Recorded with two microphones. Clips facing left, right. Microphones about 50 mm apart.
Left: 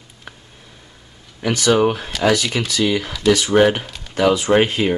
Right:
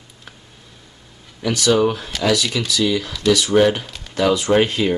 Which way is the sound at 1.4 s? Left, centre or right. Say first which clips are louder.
Left 1 dB; left.